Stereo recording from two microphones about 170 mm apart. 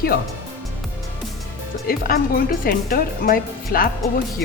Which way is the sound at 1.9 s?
60° left (ahead or behind).